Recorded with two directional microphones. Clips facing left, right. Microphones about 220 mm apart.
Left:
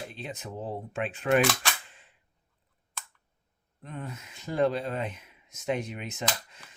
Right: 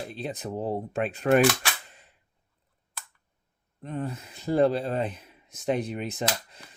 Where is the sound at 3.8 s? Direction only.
35° right (ahead or behind).